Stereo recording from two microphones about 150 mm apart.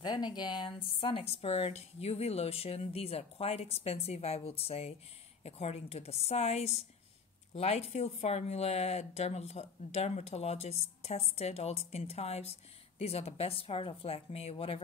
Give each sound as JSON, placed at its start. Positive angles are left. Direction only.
{"t": 0.0, "sound": "a woman's voice", "side_deg": 30}